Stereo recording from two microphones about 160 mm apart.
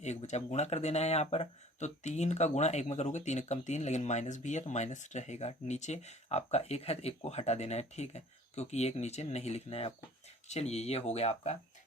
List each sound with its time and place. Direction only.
0.0 s speech: 45° left (ahead or behind)